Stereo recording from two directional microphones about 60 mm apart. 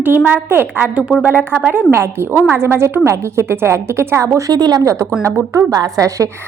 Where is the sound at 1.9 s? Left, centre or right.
Right.